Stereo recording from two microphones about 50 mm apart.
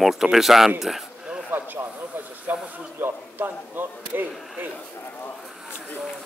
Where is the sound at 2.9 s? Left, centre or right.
Right.